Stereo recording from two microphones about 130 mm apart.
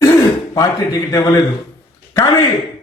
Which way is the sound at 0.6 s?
25° left (ahead or behind).